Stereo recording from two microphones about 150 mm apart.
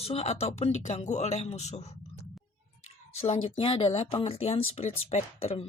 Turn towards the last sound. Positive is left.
turn(degrees=40)  # may be behind; listen again after turning